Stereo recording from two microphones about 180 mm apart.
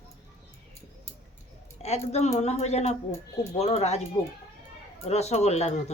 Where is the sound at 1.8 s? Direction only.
35° left (ahead or behind).